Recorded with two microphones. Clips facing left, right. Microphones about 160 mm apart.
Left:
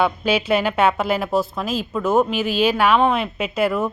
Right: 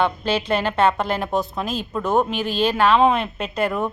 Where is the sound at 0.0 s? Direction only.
10° left (ahead or behind).